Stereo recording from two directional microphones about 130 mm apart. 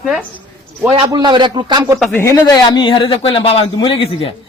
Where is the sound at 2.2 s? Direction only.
25° left (ahead or behind).